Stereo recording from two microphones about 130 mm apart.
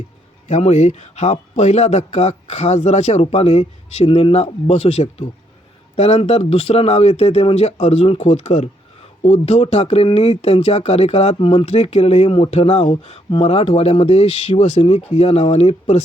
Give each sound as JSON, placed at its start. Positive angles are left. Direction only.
{"t": 0.4, "sound": "speech", "side_deg": 60}